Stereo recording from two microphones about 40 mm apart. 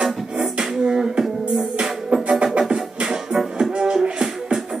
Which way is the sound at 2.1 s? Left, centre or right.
Right.